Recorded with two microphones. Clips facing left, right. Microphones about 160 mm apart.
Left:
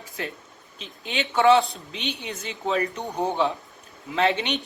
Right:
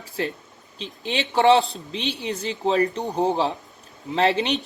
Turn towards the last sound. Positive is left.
turn(degrees=-35)  # may be behind; listen again after turning